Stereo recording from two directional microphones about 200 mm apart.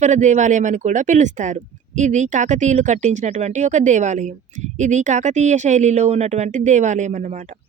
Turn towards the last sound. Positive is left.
turn(degrees=-35)  # may be behind; listen again after turning